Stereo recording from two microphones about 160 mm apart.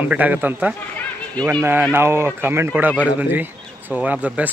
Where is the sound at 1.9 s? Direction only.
15° right (ahead or behind).